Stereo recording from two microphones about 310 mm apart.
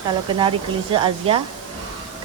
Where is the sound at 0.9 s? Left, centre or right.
Centre.